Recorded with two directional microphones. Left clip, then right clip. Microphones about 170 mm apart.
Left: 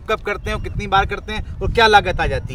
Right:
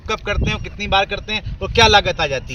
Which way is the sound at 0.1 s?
45° left (ahead or behind).